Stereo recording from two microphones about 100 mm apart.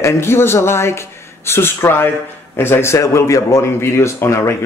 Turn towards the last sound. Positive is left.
turn(degrees=30)  # may be behind; listen again after turning